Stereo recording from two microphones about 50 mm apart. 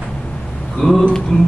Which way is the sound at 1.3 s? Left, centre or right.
Left.